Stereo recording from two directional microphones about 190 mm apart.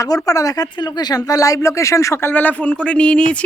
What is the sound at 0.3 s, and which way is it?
Speech, 20° left (ahead or behind).